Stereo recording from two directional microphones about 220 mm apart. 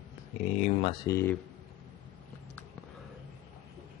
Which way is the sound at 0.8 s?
15° left (ahead or behind).